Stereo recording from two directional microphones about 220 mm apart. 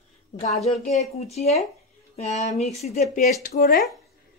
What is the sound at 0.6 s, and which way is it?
A woman's voice, 30° left (ahead or behind).